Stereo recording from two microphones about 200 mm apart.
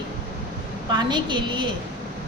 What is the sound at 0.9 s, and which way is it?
Speech, 20° right (ahead or behind).